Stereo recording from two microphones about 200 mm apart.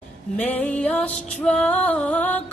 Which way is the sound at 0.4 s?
5° left (ahead or behind).